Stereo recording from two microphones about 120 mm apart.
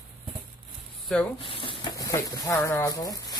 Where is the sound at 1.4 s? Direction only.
45° left (ahead or behind).